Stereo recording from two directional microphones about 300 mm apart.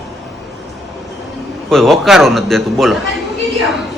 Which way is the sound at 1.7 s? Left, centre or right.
Centre.